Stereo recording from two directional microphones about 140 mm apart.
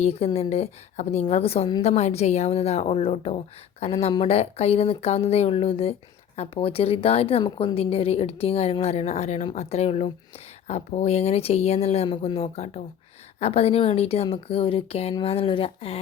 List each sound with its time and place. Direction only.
0.0 s speech: 45° left (ahead or behind)